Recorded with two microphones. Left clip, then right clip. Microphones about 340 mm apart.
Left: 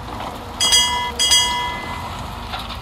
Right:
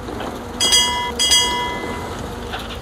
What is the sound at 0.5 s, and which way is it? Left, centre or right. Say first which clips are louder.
Train: even; centre.